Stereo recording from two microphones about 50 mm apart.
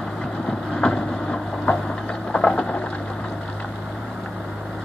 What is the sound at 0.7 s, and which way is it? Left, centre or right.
Vehicle, centre.